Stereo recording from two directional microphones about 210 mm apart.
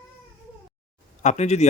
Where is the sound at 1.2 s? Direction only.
35° left (ahead or behind).